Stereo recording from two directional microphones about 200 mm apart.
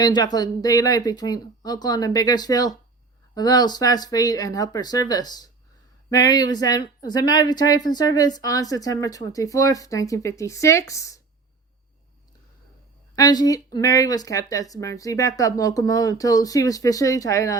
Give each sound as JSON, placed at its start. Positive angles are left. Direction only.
{"t": 0.0, "sound": "speech", "side_deg": 20}
{"t": 13.1, "sound": "speech", "side_deg": 20}